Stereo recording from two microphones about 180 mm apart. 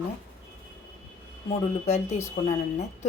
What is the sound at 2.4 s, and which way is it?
Speech, 45° left (ahead or behind).